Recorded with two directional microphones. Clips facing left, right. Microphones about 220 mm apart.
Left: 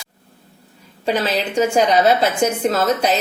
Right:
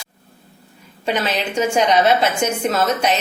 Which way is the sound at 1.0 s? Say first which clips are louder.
Left 2 dB; 35° left (ahead or behind).